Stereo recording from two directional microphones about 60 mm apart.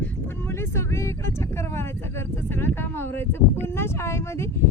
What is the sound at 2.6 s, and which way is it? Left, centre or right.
Speech, left.